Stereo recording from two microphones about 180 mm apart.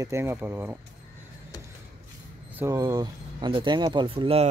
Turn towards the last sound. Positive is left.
turn(degrees=-30)  # may be behind; listen again after turning